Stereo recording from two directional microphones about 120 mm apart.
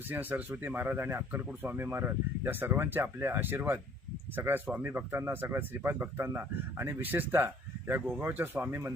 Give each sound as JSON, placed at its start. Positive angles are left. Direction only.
{"t": 0.1, "sound": "speech", "side_deg": -15}